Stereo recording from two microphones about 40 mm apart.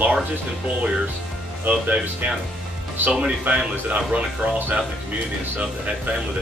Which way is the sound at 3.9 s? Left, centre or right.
Right.